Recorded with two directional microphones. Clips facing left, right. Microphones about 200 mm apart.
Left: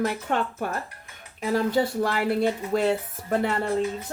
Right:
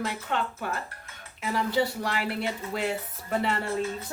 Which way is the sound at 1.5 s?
50° left (ahead or behind).